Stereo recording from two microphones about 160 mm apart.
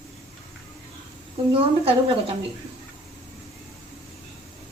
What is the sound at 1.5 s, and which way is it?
Speech, 35° right (ahead or behind).